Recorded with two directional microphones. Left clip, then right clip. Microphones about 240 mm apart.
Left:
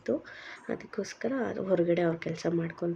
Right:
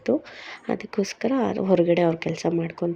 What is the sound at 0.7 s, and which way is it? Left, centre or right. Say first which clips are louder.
Speech: right 9 dB; right.